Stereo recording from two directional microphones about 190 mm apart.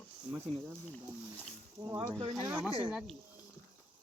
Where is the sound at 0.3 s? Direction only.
10° right (ahead or behind).